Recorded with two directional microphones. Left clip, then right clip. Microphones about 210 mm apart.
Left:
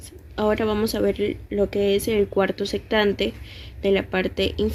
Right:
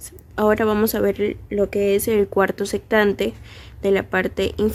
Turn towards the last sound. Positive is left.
turn(degrees=-35)  # may be behind; listen again after turning